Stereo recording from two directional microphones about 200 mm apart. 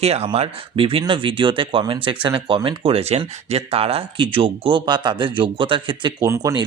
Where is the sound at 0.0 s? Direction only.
30° right (ahead or behind).